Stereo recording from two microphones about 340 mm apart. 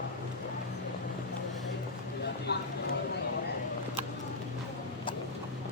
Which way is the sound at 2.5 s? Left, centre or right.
Left.